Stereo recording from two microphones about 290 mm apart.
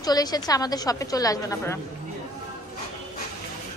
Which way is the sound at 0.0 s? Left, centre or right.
Centre.